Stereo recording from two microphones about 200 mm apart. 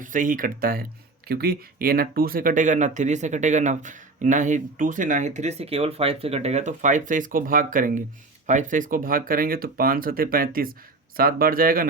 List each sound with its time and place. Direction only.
0.0 s speech: 40° right (ahead or behind)